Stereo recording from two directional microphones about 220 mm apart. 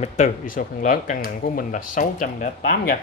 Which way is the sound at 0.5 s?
40° left (ahead or behind).